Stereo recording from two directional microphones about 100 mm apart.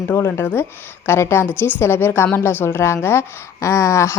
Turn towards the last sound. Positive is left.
turn(degrees=30)  # may be behind; listen again after turning